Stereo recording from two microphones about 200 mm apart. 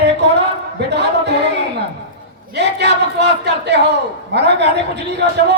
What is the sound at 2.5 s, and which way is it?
Speech, 60° right (ahead or behind).